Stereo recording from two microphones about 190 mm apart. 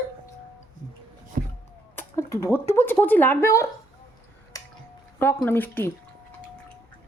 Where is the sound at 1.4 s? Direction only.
45° right (ahead or behind).